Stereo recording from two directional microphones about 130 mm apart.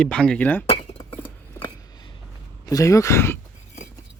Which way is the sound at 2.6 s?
25° left (ahead or behind).